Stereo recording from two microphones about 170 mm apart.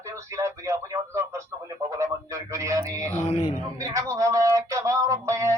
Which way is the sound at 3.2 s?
35° left (ahead or behind).